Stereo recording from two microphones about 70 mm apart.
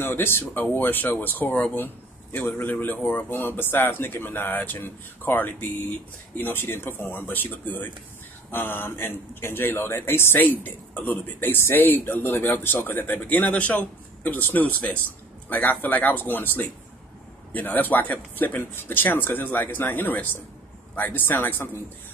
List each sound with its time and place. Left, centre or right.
0.0 s a man's voice: left